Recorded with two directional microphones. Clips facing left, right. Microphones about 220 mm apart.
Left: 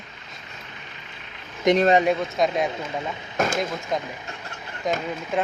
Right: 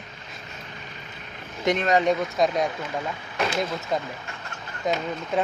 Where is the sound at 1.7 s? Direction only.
20° left (ahead or behind).